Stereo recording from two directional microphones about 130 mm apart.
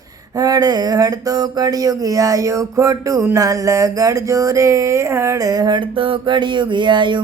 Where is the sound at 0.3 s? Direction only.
30° right (ahead or behind).